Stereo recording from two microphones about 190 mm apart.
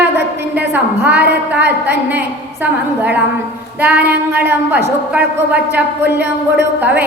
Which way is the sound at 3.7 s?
10° right (ahead or behind).